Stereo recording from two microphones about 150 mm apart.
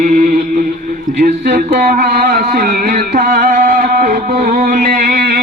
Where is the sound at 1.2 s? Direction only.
75° right (ahead or behind).